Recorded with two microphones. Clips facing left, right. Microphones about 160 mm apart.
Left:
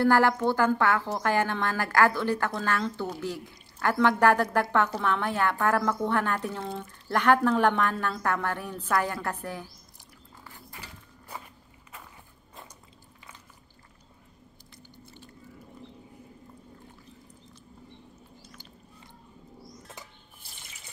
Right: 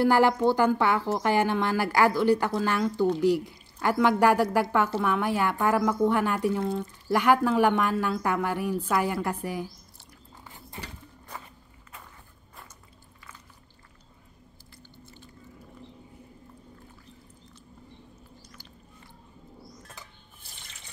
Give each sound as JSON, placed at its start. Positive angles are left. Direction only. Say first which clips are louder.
{"t": 0.0, "sound": "a woman's voice", "louder": "right 1 dB", "side_deg": -15}